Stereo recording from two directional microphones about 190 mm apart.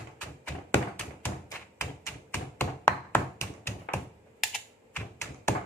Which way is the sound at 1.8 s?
15° left (ahead or behind).